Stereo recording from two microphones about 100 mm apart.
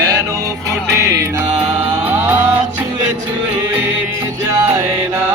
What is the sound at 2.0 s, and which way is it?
Music, 20° right (ahead or behind).